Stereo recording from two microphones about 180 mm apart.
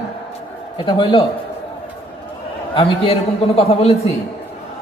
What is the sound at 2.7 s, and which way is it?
A man's voice, 30° left (ahead or behind).